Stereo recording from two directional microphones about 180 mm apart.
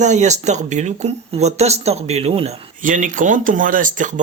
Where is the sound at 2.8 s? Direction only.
45° right (ahead or behind).